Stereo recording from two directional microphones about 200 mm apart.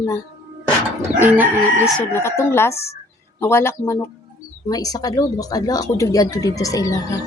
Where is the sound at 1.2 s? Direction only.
10° right (ahead or behind).